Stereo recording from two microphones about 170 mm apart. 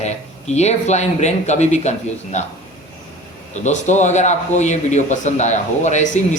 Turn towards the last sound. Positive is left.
turn(degrees=45)  # may be behind; listen again after turning